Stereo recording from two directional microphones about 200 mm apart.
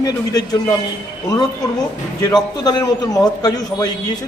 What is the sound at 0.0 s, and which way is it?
Speech, 20° left (ahead or behind).